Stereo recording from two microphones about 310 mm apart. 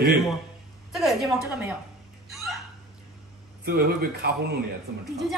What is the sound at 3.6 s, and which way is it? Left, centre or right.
Speech, right.